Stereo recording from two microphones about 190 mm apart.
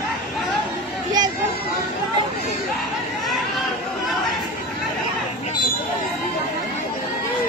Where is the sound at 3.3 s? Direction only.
Centre (ahead or behind).